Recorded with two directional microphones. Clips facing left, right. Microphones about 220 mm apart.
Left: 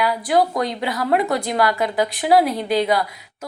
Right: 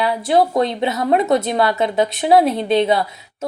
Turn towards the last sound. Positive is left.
turn(degrees=-25)  # may be behind; listen again after turning